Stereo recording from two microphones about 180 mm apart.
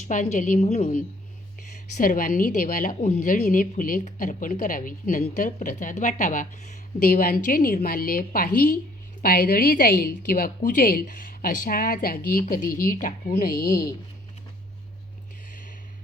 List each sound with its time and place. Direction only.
0.1 s a woman's voice: 45° left (ahead or behind)
2.0 s a woman's voice: 50° left (ahead or behind)